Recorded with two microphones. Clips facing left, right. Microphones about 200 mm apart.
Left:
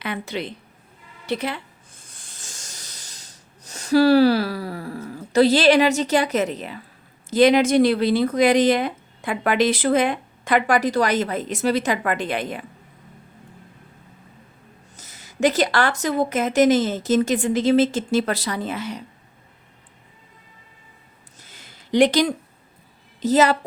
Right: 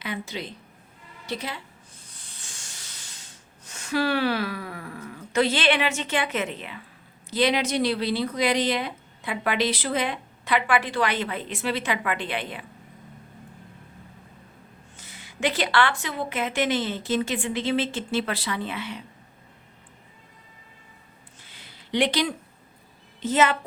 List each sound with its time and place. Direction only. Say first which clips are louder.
0.0 s a woman's voice: left 5 dB; 60° left (ahead or behind)
2.0 s a sound: left 2 dB; 45° left (ahead or behind)
7.3 s speech: left 8 dB; 45° left (ahead or behind)
14.9 s speech: left 8 dB; 40° left (ahead or behind)
21.3 s a sound: left 4 dB; 45° left (ahead or behind)
23.2 s speech: left 5 dB; 35° left (ahead or behind)